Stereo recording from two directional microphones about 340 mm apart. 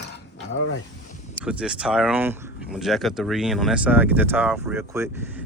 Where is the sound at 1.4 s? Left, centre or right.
Centre.